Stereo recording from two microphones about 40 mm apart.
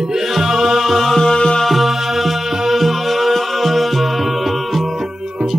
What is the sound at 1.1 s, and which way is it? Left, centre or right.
Music, centre.